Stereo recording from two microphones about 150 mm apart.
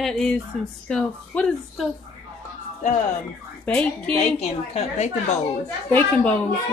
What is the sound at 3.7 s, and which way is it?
Speech, 5° left (ahead or behind).